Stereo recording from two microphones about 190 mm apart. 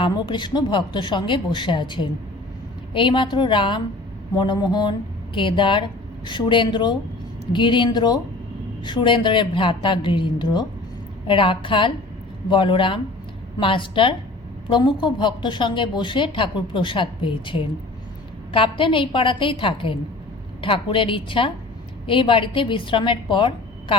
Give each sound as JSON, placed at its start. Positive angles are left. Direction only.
{"t": 0.0, "sound": "a woman's voice", "side_deg": 25}